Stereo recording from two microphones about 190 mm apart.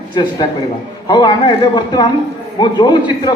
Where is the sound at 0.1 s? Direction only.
25° left (ahead or behind).